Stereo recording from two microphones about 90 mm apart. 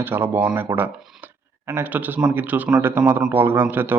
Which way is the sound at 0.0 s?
25° right (ahead or behind).